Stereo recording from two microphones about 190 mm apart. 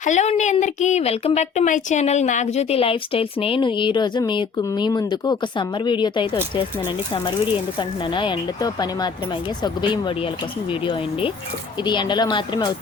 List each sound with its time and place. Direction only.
0.0 s a woman's voice: 40° left (ahead or behind); by 12.7 s 25° left (ahead or behind)